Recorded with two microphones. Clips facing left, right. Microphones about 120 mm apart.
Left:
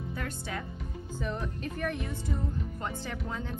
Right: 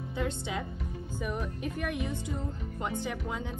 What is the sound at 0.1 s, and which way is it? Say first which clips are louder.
Speech: right 6 dB; 20° right (ahead or behind).